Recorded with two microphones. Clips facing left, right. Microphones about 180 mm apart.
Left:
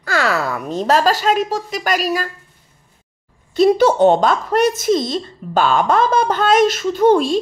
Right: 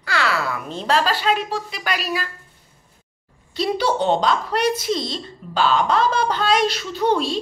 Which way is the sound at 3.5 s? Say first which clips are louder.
Left 9 dB; 50° left (ahead or behind).